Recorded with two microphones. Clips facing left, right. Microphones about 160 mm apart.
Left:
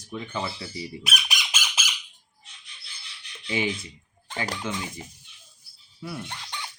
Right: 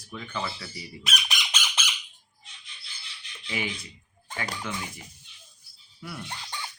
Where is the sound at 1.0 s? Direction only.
5° left (ahead or behind).